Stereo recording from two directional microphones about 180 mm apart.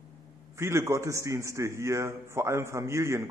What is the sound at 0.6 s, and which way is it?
A man's voice, 15° right (ahead or behind).